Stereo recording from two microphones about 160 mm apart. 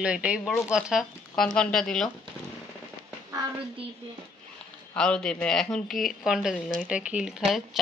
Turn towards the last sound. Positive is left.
turn(degrees=-5)  # may be behind; listen again after turning